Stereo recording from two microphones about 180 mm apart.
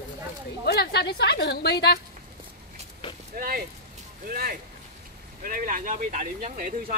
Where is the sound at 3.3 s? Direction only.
55° right (ahead or behind).